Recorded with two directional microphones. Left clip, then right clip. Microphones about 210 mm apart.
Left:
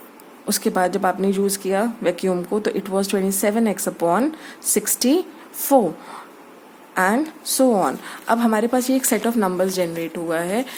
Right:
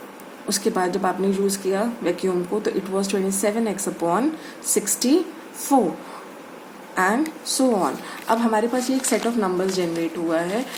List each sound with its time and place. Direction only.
0.4 s speech: 45° left (ahead or behind)
6.9 s speech: 45° left (ahead or behind)